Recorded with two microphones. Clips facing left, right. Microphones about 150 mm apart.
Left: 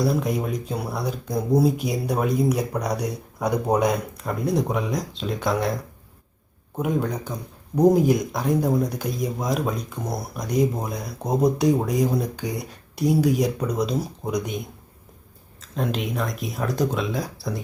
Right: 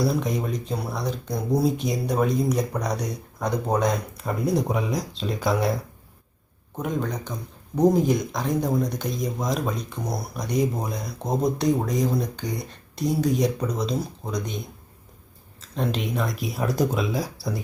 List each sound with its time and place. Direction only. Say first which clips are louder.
0.0 s speech: left 1 dB; centre (ahead or behind)
6.7 s speech: left 3 dB; 10° left (ahead or behind)
15.7 s speech: even; centre (ahead or behind)